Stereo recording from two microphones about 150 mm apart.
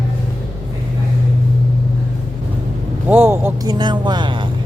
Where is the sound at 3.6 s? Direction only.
30° right (ahead or behind).